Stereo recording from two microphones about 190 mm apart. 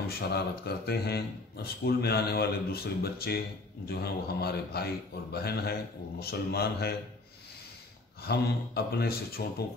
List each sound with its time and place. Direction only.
0.1 s speech: 55° left (ahead or behind)
8.2 s a man's voice: 55° left (ahead or behind)